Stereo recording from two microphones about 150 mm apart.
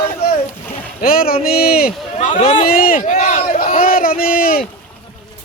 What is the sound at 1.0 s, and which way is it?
Speech, 80° left.